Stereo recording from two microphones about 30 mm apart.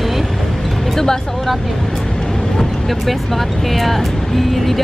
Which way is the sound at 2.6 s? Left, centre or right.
Centre.